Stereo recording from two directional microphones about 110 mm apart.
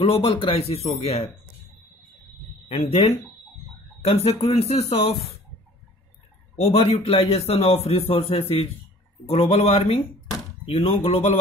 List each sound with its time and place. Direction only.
0.0 s speech: 65° left (ahead or behind)
2.7 s a man's voice: 65° left (ahead or behind)
6.5 s a man's voice: 80° left; by 11.3 s 65° left (ahead or behind)